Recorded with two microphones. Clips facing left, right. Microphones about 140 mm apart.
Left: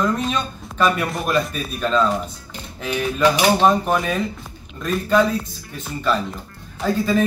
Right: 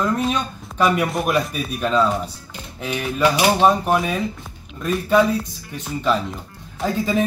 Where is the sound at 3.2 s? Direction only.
10° right (ahead or behind).